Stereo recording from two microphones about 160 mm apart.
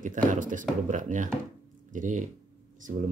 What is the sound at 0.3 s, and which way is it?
Speech, 55° right (ahead or behind).